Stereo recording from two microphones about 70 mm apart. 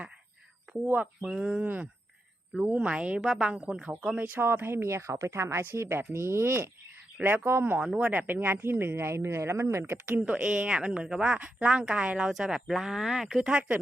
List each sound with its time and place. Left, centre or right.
1.2 s a woman's voice: centre
1.6 s a woman's voice: right; by 4.2 s centre
4.2 s a woman's voice: right
7.8 s a woman's voice: centre; by 10.0 s right
10.1 s a woman's voice: centre